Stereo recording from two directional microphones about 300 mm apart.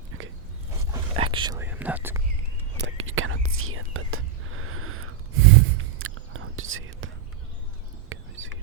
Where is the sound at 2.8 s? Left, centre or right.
Right.